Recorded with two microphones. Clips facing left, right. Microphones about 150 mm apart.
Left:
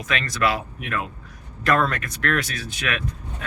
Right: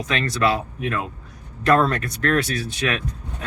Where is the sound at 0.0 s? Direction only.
30° right (ahead or behind).